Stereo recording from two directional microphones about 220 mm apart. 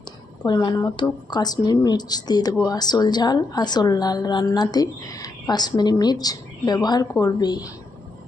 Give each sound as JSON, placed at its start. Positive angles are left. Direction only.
{"t": 0.4, "sound": "a woman's voice", "side_deg": 20}